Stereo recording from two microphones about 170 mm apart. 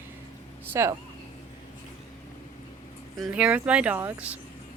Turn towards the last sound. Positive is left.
turn(degrees=-10)  # may be behind; listen again after turning